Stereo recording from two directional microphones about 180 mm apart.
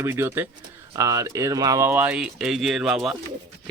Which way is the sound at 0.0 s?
15° right (ahead or behind).